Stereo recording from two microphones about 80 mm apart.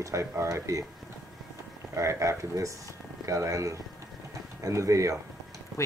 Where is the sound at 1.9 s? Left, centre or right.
Right.